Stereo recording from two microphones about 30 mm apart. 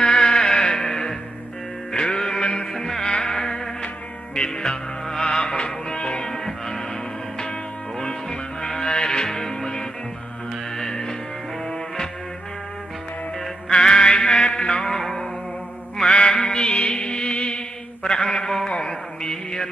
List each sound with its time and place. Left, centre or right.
0.0 s music: left
8.5 s a sound: left
9.0 s music: left
13.7 s music: left
14.9 s music: centre
16.3 s mantra: centre
16.5 s music: left
18.0 s a sound: left